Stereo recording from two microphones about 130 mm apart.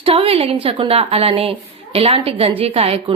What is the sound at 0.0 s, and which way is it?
A woman's voice, 45° right (ahead or behind).